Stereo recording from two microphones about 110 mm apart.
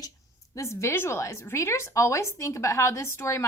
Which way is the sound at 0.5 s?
25° left (ahead or behind).